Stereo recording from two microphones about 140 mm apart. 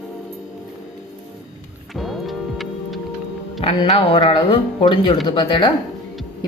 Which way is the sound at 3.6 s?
40° left (ahead or behind).